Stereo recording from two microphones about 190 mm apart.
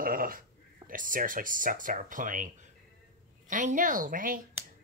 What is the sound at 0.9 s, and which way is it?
A woman's voice, 45° right (ahead or behind).